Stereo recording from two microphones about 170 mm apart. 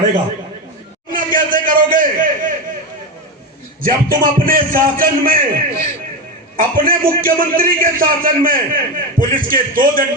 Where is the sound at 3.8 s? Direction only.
55° right (ahead or behind).